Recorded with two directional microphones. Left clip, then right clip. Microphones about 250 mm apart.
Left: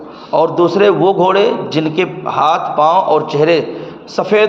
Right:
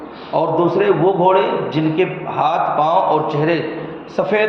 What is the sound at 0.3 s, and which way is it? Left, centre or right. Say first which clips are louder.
A man's voice: left 4 dB; left.